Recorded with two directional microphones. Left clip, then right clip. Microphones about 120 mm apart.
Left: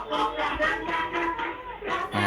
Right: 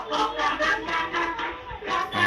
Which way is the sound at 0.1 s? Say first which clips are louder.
Right 2 dB; 40° left (ahead or behind).